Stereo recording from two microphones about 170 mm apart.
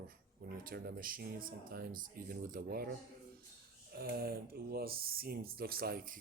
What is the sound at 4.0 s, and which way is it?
Speech, 65° right (ahead or behind).